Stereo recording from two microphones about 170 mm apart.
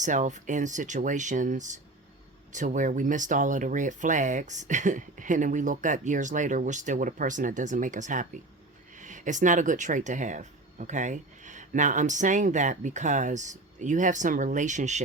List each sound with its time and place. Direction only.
0.0 s speech: 45° right (ahead or behind)